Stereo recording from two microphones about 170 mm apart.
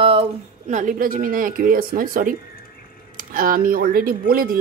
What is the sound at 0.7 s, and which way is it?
Speech, 50° right (ahead or behind).